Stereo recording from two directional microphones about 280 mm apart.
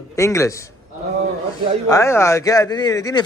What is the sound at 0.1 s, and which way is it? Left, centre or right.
Speech, centre.